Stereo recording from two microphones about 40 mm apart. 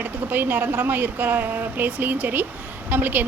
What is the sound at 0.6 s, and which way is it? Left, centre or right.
A woman's voice, right.